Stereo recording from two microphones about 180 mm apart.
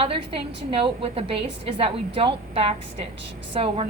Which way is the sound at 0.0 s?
30° right (ahead or behind).